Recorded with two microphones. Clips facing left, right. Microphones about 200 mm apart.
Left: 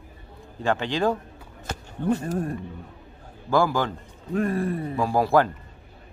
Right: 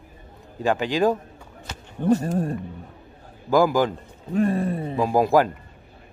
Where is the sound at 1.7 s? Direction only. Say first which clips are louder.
Left 6 dB; 50° left (ahead or behind).